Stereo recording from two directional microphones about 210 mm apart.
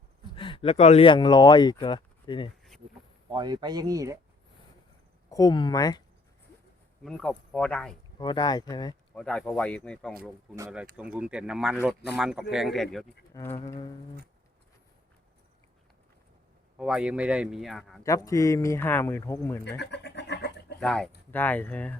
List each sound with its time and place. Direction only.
0.3 s speech: 25° left (ahead or behind)
3.2 s speech: 20° right (ahead or behind)
5.3 s speech: 20° left (ahead or behind)
7.0 s speech: 5° left (ahead or behind)
8.2 s speech: 20° left (ahead or behind)
9.1 s speech: 5° left (ahead or behind)
10.9 s speech: 5° right (ahead or behind)
13.3 s speech: 10° left (ahead or behind)
16.7 s speech: 5° right (ahead or behind)
18.0 s speech: 15° left (ahead or behind)
19.6 s speech: 55° left (ahead or behind)
20.7 s speech: 5° left (ahead or behind)